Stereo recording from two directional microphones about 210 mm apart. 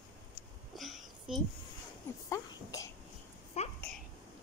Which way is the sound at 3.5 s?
30° left (ahead or behind).